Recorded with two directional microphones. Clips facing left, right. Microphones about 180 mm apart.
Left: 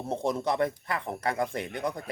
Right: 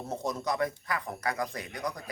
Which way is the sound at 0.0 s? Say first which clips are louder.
Left 4 dB; 30° left (ahead or behind).